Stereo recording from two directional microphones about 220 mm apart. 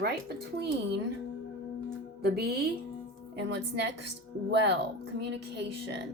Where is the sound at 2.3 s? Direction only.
45° right (ahead or behind).